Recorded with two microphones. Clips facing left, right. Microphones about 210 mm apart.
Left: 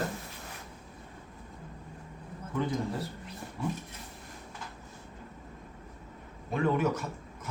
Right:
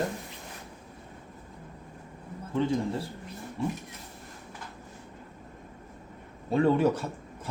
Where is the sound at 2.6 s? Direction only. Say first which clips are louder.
Right 5 dB; 25° right (ahead or behind).